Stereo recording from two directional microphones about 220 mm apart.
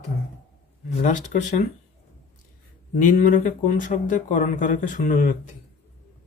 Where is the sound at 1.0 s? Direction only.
35° left (ahead or behind).